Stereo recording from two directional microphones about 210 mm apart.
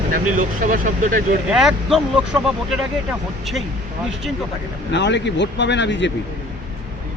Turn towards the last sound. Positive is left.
turn(degrees=60)  # may be behind; listen again after turning